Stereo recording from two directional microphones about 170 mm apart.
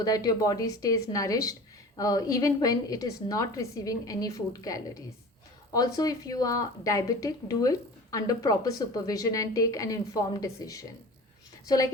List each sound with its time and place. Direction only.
0.0 s a woman's voice: 20° left (ahead or behind)